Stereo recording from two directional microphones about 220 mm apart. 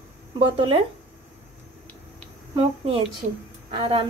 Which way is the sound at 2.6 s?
25° right (ahead or behind).